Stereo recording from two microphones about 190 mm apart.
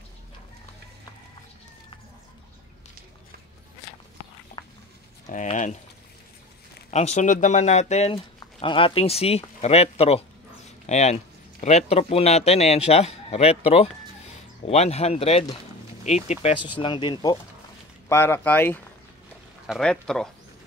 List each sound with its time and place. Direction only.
5.2 s speech: 40° left (ahead or behind)
6.9 s speech: 35° left (ahead or behind)
18.0 s speech: 10° left (ahead or behind)